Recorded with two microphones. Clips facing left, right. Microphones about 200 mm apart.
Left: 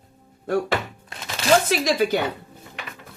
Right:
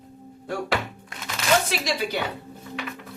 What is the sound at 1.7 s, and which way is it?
Speech, 45° left (ahead or behind).